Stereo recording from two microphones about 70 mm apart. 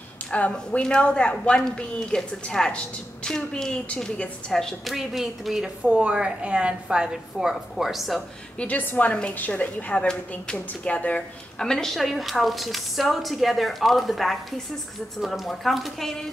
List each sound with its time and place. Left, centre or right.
0.3 s a woman's voice: centre
8.5 s a woman's voice: left
11.6 s a woman's voice: centre